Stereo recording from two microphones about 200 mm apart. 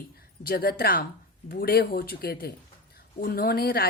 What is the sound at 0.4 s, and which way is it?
A woman's voice, 50° left (ahead or behind).